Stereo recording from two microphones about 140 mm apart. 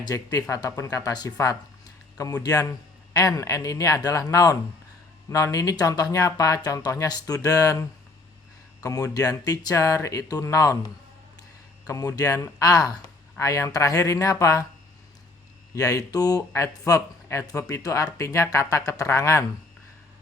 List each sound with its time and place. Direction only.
0.0 s speech: 25° left (ahead or behind)
11.9 s speech: 25° left (ahead or behind)
15.7 s speech: 25° left (ahead or behind)